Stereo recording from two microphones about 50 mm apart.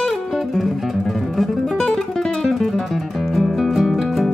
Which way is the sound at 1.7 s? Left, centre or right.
Centre.